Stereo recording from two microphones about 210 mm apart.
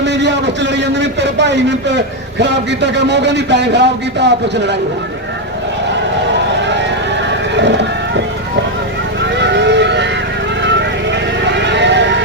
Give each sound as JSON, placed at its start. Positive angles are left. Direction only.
{"t": 0.0, "sound": "a man's voice", "side_deg": -55}
{"t": 6.6, "sound": "vehicle", "side_deg": -55}
{"t": 7.5, "sound": "music", "side_deg": -55}
{"t": 9.3, "sound": "vehicle", "side_deg": -55}